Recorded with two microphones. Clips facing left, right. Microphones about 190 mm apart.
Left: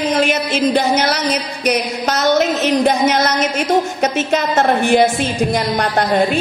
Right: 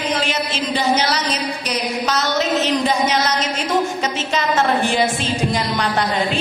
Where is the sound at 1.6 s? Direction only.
60° left (ahead or behind).